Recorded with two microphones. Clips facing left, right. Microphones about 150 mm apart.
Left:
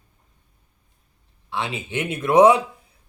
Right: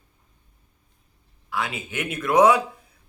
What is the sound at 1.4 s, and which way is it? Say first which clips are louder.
Speech: left 1 dB; 25° left (ahead or behind).